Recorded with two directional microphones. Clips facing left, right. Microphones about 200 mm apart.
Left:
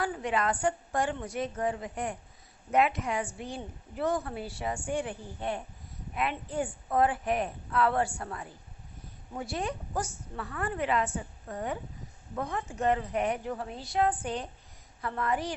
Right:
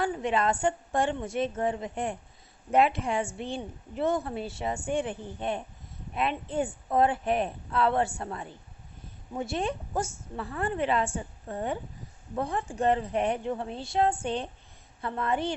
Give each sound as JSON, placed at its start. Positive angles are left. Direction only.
{"t": 0.0, "sound": "a woman's voice", "side_deg": -25}